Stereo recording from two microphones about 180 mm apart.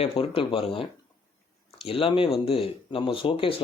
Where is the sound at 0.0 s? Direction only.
30° left (ahead or behind).